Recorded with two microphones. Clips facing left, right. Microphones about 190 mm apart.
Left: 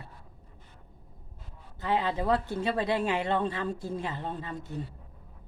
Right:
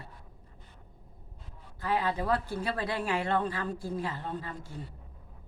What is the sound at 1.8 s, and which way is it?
Speech, 25° left (ahead or behind).